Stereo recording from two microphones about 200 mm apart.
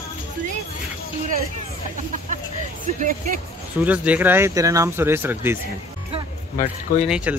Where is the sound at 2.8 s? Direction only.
45° right (ahead or behind).